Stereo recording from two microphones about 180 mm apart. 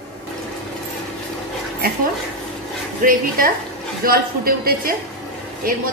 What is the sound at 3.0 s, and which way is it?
A man's voice, 50° right (ahead or behind).